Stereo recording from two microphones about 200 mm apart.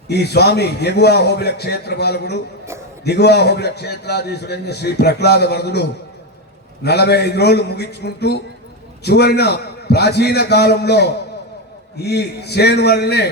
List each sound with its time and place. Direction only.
0.1 s a man's voice: 55° left (ahead or behind)
6.8 s a man's voice: 55° left (ahead or behind)